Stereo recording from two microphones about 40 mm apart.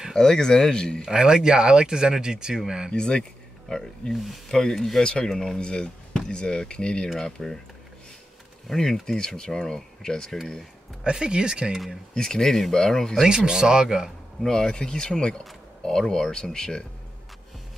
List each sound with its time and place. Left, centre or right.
0.1 s speech: centre
1.0 s speech: centre
2.9 s speech: left
4.1 s speech: centre
4.5 s speech: centre
5.6 s speech: left
8.6 s speech: centre
11.1 s speech: right
11.7 s speech: centre
12.1 s speech: centre
13.5 s speech: centre
14.4 s speech: centre